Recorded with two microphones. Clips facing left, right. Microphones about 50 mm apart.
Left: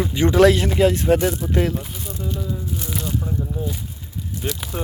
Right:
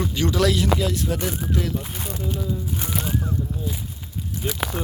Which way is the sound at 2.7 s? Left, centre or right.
Right.